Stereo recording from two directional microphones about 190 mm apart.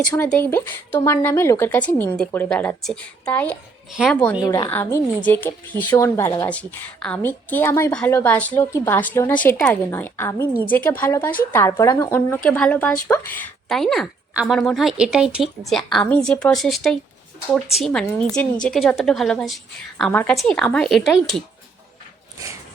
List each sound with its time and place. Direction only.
0.3 s speech: 10° left (ahead or behind)
4.4 s a woman's voice: 20° left (ahead or behind); by 21.4 s centre (ahead or behind)